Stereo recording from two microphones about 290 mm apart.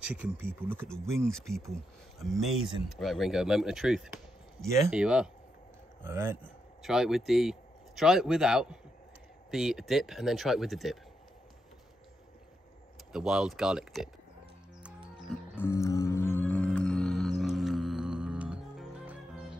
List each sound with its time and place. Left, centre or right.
0.1 s speech: centre
13.1 s speech: centre
14.8 s music: centre